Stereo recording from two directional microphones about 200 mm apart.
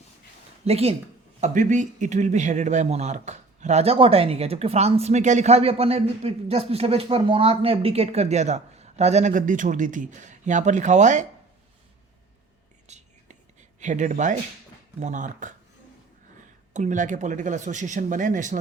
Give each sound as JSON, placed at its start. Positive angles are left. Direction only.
{"t": 0.6, "sound": "a man's voice", "side_deg": -30}
{"t": 12.9, "sound": "whispering", "side_deg": -35}
{"t": 13.7, "sound": "a man's voice", "side_deg": -40}
{"t": 16.7, "sound": "a man's voice", "side_deg": -40}